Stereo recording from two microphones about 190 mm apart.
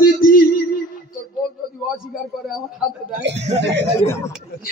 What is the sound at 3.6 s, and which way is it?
Speech, 65° right (ahead or behind).